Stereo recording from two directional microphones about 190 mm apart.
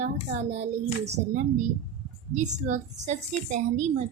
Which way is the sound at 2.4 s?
40° right (ahead or behind).